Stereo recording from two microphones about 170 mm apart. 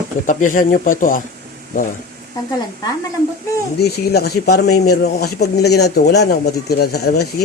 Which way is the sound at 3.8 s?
70° left (ahead or behind).